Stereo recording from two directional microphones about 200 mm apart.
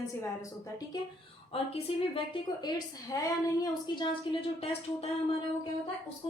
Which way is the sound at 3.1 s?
15° left (ahead or behind).